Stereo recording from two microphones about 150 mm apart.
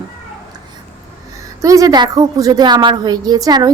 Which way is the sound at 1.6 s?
20° right (ahead or behind).